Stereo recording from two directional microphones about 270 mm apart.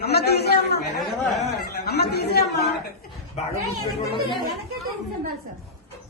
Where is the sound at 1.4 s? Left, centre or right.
Left.